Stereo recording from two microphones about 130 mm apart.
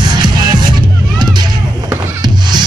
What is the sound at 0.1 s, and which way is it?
Music, 35° right (ahead or behind).